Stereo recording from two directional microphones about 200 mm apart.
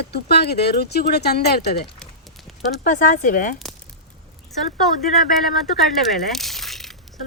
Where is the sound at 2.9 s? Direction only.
40° left (ahead or behind).